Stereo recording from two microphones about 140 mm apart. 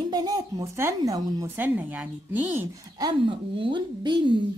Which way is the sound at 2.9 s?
35° right (ahead or behind).